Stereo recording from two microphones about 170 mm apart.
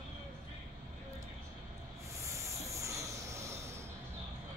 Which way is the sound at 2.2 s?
20° right (ahead or behind).